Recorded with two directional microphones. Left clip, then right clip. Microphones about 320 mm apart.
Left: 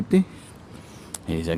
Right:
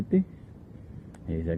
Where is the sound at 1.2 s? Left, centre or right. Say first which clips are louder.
Left 6 dB; centre.